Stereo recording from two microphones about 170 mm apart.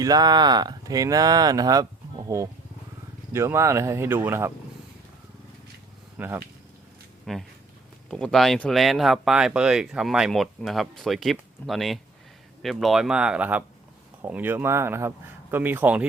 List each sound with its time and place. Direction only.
0.0 s speech: 25° right (ahead or behind)
6.1 s speech: 10° right (ahead or behind)
7.3 s speech: centre (ahead or behind)